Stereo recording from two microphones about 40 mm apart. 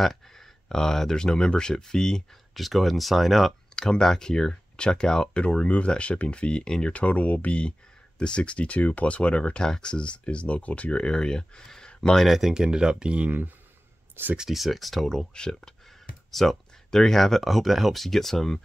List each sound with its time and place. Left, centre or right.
0.0 s speech: centre
2.5 s speech: centre
3.7 s speech: centre
6.9 s speech: left; by 11.9 s centre
12.3 s speech: centre; by 13.3 s right
14.5 s speech: centre
15.0 s speech: centre
16.3 s speech: centre